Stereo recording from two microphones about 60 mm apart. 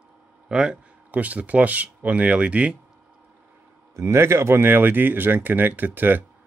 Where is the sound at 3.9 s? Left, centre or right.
Right.